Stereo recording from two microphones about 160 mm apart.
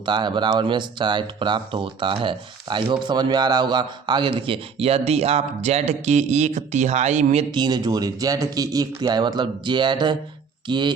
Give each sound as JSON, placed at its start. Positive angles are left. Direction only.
{"t": 0.0, "sound": "speech", "side_deg": -30}
{"t": 7.5, "sound": "speech", "side_deg": -25}